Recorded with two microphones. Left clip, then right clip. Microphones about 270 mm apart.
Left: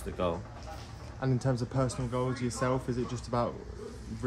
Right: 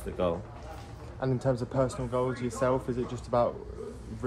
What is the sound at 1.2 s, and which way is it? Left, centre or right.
Speech, left.